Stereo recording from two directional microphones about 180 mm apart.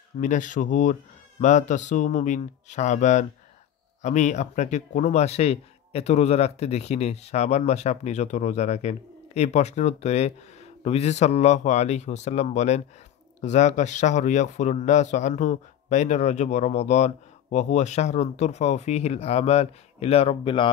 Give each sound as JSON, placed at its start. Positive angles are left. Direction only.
{"t": 0.2, "sound": "speech", "side_deg": 45}